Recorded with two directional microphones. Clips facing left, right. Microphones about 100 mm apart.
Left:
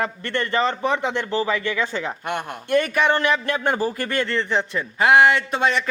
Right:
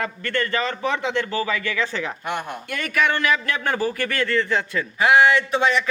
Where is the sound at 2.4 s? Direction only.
35° left (ahead or behind).